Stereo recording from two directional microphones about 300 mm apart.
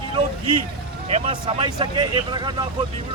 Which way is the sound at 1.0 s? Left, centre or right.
Centre.